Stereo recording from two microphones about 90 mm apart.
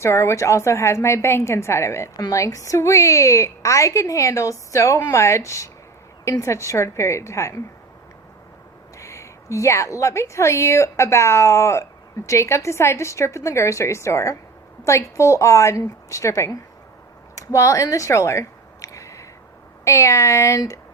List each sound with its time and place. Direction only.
0.0 s a woman's voice: 30° left (ahead or behind)
9.0 s a woman's voice: 35° left (ahead or behind)
17.3 s a sound: 35° left (ahead or behind)
19.8 s a woman's voice: 35° left (ahead or behind)